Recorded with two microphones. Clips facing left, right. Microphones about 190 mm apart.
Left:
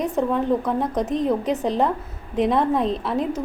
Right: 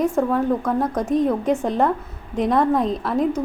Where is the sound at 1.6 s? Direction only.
Centre (ahead or behind).